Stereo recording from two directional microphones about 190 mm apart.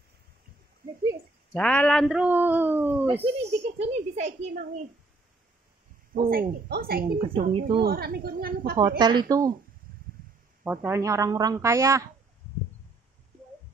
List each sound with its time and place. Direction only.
0.8 s speech: 50° right (ahead or behind)
1.5 s a man's voice: 10° left (ahead or behind); by 3.2 s 10° right (ahead or behind)
3.2 s a woman's voice: 35° right (ahead or behind)
6.1 s speech: 50° right (ahead or behind)
8.7 s a woman's voice: 20° right (ahead or behind)
10.6 s a man's voice: 10° right (ahead or behind)